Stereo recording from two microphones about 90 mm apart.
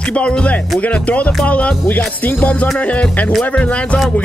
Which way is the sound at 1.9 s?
20° left (ahead or behind).